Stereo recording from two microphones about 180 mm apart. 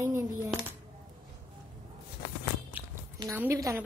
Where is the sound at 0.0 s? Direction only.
15° right (ahead or behind).